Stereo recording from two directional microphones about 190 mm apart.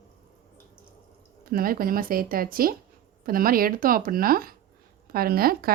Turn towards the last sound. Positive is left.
turn(degrees=-50)  # may be behind; listen again after turning